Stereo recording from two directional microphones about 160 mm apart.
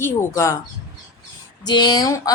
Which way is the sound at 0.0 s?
20° left (ahead or behind).